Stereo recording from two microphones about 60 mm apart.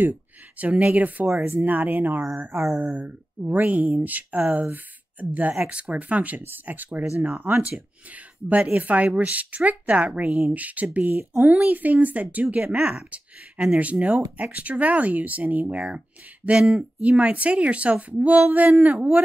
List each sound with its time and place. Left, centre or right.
0.0 s speech: right
2.5 s a sound: right
2.8 s speech: right
5.7 s speech: right